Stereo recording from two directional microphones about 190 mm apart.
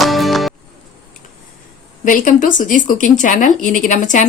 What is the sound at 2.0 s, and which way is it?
Speech, 45° left (ahead or behind).